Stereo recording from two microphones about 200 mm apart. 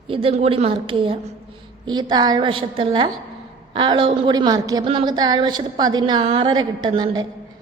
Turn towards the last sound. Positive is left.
turn(degrees=-20)  # may be behind; listen again after turning